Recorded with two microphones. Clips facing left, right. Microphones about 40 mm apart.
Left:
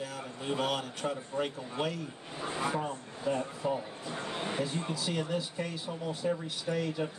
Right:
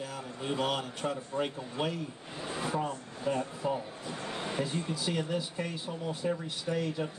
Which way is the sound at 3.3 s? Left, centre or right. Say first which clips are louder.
Even; centre.